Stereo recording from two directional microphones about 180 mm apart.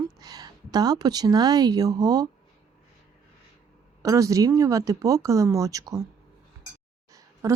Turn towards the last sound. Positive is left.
turn(degrees=-20)  # may be behind; listen again after turning